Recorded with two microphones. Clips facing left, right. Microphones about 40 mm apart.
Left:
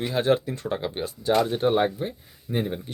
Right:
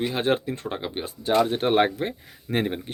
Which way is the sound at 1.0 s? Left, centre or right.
Right.